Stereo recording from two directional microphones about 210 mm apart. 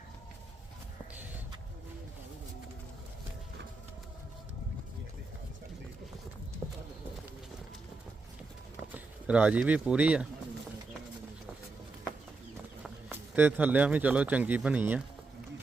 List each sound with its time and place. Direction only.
1.1 s a sound: 10° right (ahead or behind)
6.6 s clip-clop: 15° right (ahead or behind)
9.2 s speech: 5° right (ahead or behind)
12.8 s speech: 10° right (ahead or behind)